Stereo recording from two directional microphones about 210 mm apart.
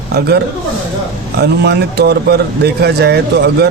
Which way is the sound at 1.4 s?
50° right (ahead or behind).